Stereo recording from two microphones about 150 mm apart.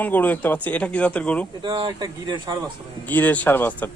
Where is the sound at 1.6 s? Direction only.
30° right (ahead or behind).